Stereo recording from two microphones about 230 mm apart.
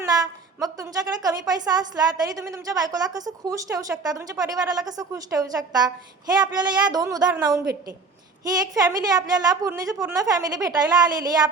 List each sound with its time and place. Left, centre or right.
0.6 s a woman's voice: centre